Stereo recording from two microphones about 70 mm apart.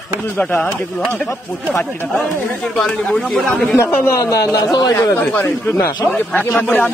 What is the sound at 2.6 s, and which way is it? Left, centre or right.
Speech, centre.